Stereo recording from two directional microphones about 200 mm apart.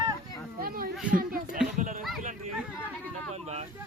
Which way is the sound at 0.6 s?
45° right (ahead or behind).